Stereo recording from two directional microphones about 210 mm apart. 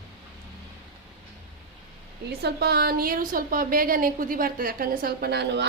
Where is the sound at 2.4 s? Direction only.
50° right (ahead or behind).